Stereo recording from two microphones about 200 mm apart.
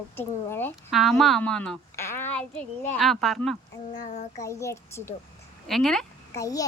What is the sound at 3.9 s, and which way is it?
Child singing, 35° left (ahead or behind).